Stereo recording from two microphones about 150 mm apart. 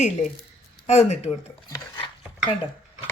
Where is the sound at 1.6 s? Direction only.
25° left (ahead or behind).